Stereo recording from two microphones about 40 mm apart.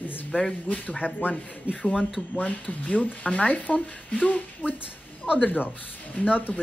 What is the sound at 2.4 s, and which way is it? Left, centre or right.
Speech, left.